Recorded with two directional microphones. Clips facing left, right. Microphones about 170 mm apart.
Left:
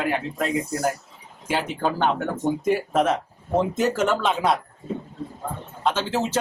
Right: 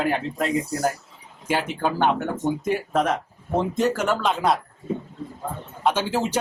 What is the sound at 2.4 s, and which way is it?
Speech, centre (ahead or behind).